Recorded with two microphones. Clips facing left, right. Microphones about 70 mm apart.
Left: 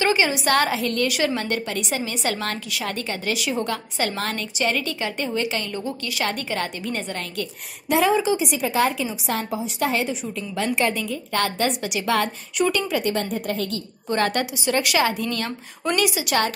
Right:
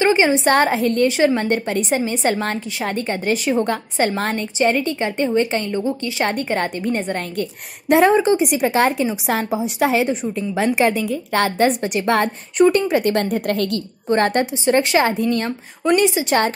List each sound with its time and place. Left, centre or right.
0.0 s a woman's voice: right
6.2 s a woman's voice: right
11.3 s a woman's voice: right
14.0 s a woman's voice: right